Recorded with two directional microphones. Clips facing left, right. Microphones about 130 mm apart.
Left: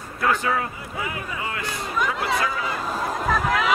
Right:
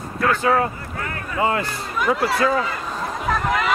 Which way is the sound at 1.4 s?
35° right (ahead or behind).